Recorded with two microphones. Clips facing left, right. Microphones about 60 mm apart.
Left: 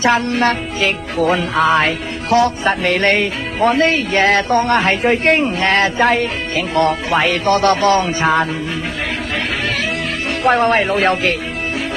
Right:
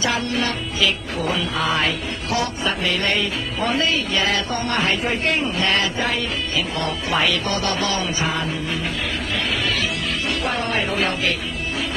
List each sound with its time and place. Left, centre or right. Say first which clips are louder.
0.0 s music: left 8 dB; left
5.9 s music: left 8 dB; left
7.1 s speech: left 6 dB; left
7.5 s music: left 10 dB; left
10.4 s music: left 13 dB; left